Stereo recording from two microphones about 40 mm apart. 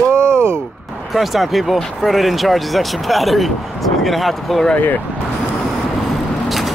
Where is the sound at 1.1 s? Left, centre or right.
Centre.